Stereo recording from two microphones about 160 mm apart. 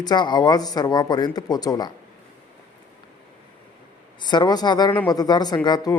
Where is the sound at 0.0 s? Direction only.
25° left (ahead or behind).